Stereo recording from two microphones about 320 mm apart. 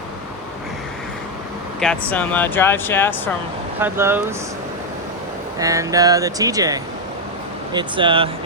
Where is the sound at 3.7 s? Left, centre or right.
Centre.